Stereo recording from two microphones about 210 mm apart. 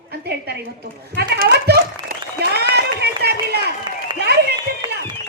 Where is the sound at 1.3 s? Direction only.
45° right (ahead or behind).